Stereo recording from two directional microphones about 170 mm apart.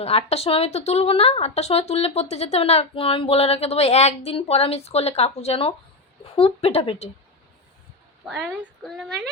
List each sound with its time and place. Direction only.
0.0 s speech: 35° left (ahead or behind)
8.3 s a woman's voice: centre (ahead or behind)